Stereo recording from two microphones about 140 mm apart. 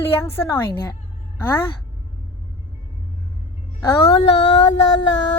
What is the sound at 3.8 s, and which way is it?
Child singing, 20° left (ahead or behind).